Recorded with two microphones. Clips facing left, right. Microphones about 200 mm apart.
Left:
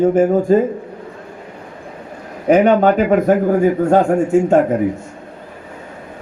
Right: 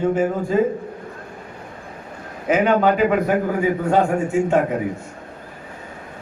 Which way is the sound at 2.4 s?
40° left (ahead or behind).